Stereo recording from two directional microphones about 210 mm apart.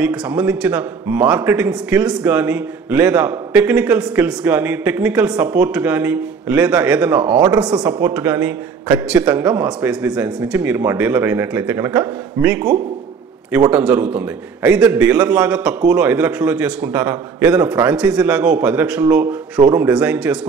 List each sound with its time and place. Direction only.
0.0 s a man's voice: 5° right (ahead or behind)